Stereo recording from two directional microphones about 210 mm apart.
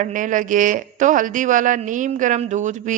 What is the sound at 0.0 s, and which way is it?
Speech, 40° right (ahead or behind).